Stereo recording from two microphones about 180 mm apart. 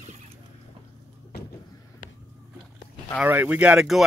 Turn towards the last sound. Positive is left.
turn(degrees=-5)  # may be behind; listen again after turning